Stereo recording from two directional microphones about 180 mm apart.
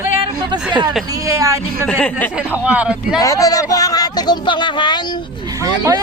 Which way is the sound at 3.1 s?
20° left (ahead or behind).